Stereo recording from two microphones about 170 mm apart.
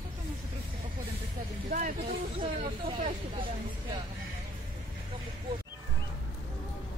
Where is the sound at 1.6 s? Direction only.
55° right (ahead or behind).